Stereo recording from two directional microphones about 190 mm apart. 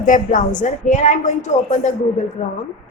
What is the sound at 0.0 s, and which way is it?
A woman's voice, 40° left (ahead or behind).